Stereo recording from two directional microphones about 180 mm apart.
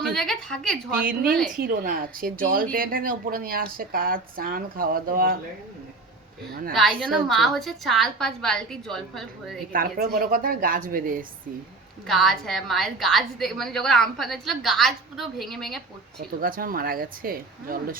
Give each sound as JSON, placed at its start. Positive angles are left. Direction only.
{"t": 0.1, "sound": "a woman's voice", "side_deg": 0}
{"t": 1.0, "sound": "speech", "side_deg": -50}
{"t": 6.5, "sound": "speech", "side_deg": -55}
{"t": 7.0, "sound": "a woman's voice", "side_deg": 0}
{"t": 9.7, "sound": "speech", "side_deg": -55}
{"t": 12.0, "sound": "a woman's voice", "side_deg": 0}
{"t": 16.1, "sound": "speech", "side_deg": -55}